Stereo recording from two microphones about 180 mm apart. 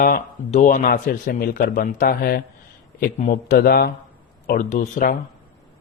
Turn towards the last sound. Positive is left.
turn(degrees=45)  # may be behind; listen again after turning